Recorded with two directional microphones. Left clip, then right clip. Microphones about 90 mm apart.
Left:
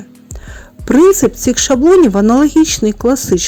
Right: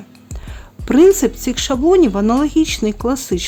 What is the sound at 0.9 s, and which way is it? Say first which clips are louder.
Music: left 3 dB; 30° left (ahead or behind).